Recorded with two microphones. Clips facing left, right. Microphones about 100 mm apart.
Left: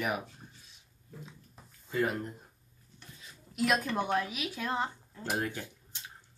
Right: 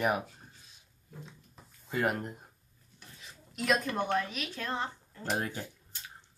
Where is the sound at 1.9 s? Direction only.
65° right (ahead or behind).